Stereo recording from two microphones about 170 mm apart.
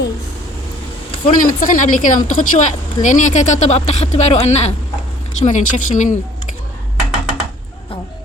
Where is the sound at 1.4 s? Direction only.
50° left (ahead or behind).